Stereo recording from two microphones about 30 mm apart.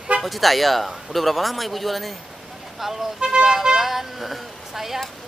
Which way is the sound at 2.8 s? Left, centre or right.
Centre.